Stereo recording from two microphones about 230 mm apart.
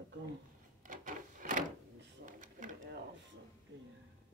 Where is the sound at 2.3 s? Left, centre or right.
Right.